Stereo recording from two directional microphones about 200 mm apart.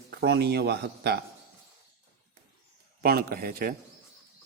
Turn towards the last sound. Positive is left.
turn(degrees=-45)  # may be behind; listen again after turning